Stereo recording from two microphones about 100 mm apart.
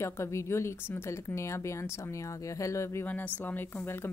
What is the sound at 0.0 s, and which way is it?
A woman's voice, 30° left (ahead or behind).